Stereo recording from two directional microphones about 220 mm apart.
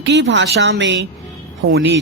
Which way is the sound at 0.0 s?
55° right (ahead or behind).